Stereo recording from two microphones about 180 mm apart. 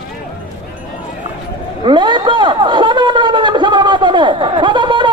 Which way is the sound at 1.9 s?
25° right (ahead or behind).